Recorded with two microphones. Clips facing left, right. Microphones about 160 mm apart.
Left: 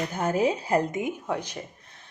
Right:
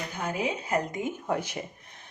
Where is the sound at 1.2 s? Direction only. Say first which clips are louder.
Right 1 dB; 10° right (ahead or behind).